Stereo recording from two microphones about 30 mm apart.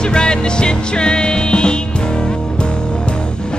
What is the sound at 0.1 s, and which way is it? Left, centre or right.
Music, left.